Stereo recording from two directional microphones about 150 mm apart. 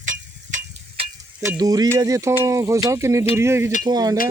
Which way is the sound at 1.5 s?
25° right (ahead or behind).